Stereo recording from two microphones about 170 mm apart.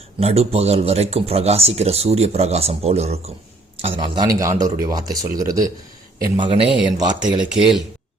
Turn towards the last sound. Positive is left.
turn(degrees=-5)  # may be behind; listen again after turning